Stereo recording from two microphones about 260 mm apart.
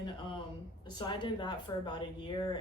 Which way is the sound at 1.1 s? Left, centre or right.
Centre.